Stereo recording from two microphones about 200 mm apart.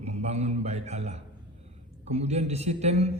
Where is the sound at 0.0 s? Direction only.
35° right (ahead or behind).